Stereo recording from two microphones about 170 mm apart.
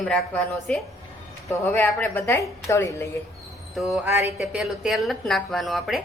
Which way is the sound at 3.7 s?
Centre (ahead or behind).